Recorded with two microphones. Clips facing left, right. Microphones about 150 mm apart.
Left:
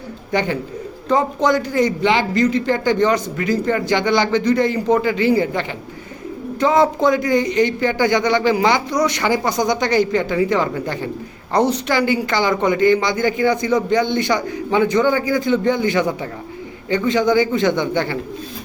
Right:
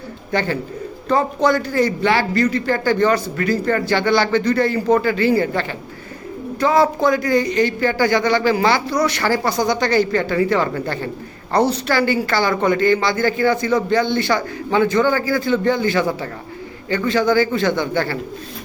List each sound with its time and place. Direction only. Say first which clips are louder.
0.3 s a woman's voice: left 1 dB; 15° left (ahead or behind)